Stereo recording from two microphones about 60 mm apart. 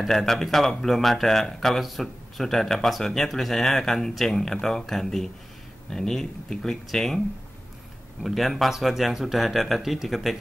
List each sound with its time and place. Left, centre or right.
0.0 s speech: centre
8.2 s speech: centre